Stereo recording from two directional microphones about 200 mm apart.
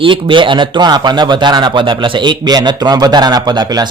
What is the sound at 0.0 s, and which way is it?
Speech, 25° right (ahead or behind).